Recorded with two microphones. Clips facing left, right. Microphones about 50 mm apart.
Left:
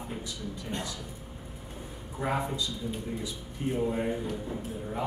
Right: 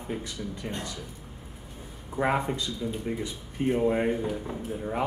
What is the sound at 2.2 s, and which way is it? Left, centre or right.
Speech, right.